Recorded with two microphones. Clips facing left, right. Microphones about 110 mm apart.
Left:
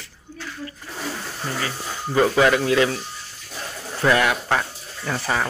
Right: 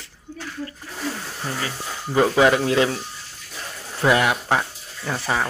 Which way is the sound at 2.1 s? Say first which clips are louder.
Right 1 dB; 15° right (ahead or behind).